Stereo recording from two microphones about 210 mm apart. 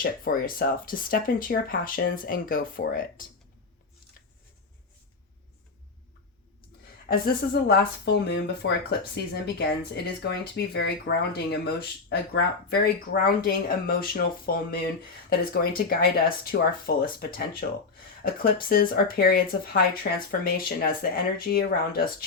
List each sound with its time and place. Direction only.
0.0 s speech: 45° left (ahead or behind)
7.1 s speech: 45° left (ahead or behind)